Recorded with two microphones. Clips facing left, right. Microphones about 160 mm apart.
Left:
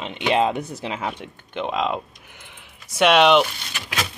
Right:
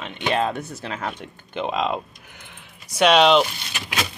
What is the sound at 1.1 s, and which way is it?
Speech, centre (ahead or behind).